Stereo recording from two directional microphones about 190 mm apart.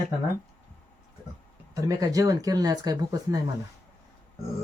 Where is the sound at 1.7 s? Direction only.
20° right (ahead or behind).